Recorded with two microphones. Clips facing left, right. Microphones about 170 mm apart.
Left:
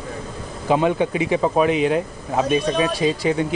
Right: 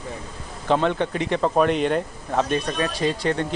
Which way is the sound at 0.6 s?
10° left (ahead or behind).